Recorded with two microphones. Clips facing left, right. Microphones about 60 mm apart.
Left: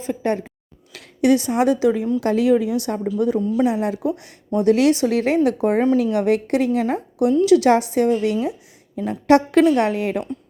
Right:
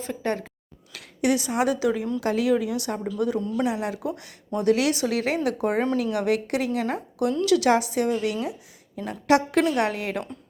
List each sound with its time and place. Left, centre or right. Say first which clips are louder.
0.0 s speech: left 5 dB; centre
0.9 s speech: left 7 dB; left
3.4 s speech: left 7 dB; centre
3.7 s speech: left 6 dB; left
6.7 s speech: left 6 dB; left
9.7 s speech: left 5 dB; left